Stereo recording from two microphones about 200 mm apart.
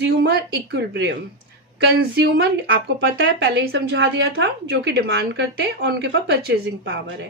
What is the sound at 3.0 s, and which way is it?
Speech, 55° right (ahead or behind).